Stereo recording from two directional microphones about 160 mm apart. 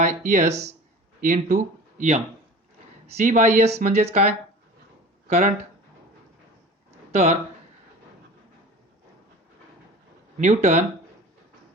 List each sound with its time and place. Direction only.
0.3 s speech: 50° right (ahead or behind)
5.3 s speech: 45° right (ahead or behind)
7.1 s speech: 45° right (ahead or behind)
10.3 s speech: 50° right (ahead or behind)